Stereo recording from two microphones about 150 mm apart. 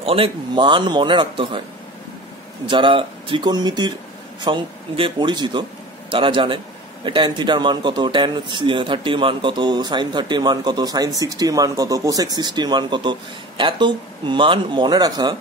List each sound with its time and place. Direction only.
0.0 s speech: 40° right (ahead or behind)
2.6 s speech: 35° right (ahead or behind)